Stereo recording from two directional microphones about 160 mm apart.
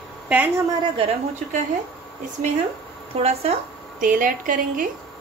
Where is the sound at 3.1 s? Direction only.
40° right (ahead or behind).